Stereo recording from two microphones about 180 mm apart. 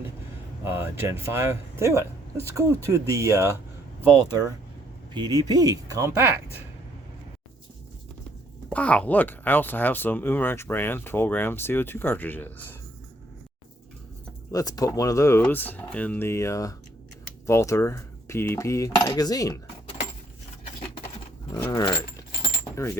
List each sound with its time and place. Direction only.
0.6 s speech: 15° right (ahead or behind)
8.7 s speech: 5° left (ahead or behind)
14.5 s speech: 20° left (ahead or behind)
21.5 s speech: 20° left (ahead or behind)